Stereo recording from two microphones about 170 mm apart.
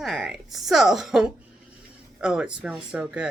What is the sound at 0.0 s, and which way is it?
Speech, centre (ahead or behind).